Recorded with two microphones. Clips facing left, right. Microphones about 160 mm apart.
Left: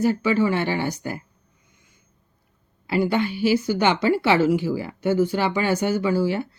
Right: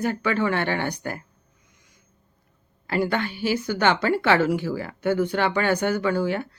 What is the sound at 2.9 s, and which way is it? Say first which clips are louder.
Speech: left 3 dB; 10° left (ahead or behind).